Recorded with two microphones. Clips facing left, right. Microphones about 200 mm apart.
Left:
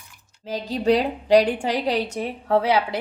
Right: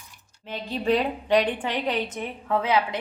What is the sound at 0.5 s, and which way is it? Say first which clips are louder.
A woman's voice: left 4 dB; 40° left (ahead or behind).